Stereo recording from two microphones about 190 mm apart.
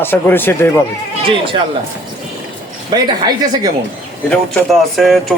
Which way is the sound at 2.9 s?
20° right (ahead or behind).